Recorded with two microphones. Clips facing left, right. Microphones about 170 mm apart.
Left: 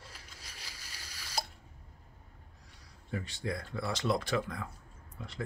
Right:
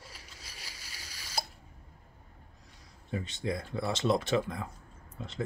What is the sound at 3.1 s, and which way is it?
Speech, 20° right (ahead or behind).